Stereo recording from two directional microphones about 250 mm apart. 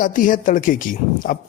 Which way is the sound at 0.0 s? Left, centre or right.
Left.